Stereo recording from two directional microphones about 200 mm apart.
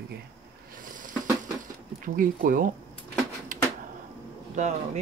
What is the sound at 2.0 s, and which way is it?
Speech, 45° right (ahead or behind).